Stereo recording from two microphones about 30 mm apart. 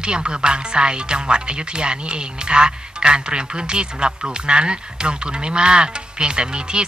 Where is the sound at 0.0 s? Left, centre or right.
Right.